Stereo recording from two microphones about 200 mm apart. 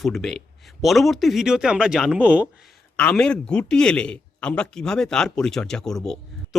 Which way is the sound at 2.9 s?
5° left (ahead or behind).